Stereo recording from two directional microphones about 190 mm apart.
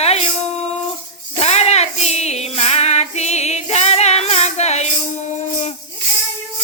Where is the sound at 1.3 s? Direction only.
35° left (ahead or behind).